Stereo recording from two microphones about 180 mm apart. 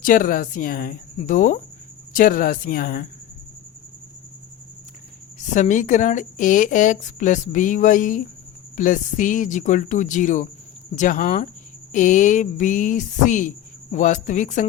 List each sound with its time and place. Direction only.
0.0 s a woman's voice: 50° left (ahead or behind)
5.5 s a woman's voice: 45° left (ahead or behind)